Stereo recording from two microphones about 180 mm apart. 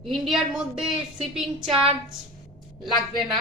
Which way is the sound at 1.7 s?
30° right (ahead or behind).